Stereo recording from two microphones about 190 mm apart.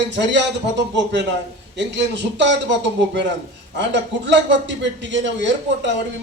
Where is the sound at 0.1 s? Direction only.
70° right (ahead or behind).